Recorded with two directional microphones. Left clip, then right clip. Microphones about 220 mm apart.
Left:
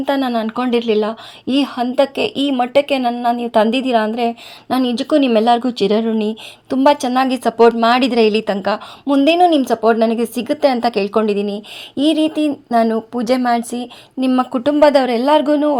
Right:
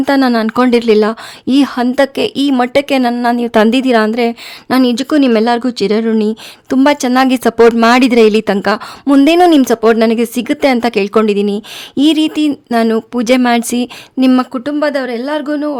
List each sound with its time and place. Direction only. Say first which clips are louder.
0.0 s a woman's voice: right 6 dB; 35° right (ahead or behind)
14.5 s speech: left 3 dB; 10° right (ahead or behind)